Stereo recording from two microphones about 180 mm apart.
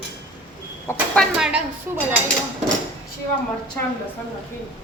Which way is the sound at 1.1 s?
5° right (ahead or behind).